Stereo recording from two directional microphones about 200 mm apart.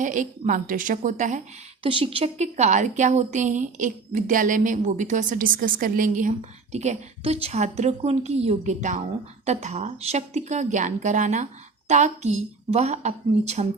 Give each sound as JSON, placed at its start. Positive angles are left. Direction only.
{"t": 0.0, "sound": "a woman's voice", "side_deg": -40}
{"t": 1.8, "sound": "a woman's voice", "side_deg": -25}